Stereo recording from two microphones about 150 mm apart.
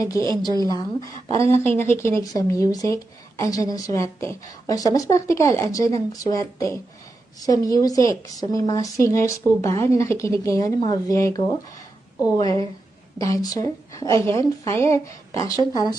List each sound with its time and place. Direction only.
0.0 s speech: 20° left (ahead or behind)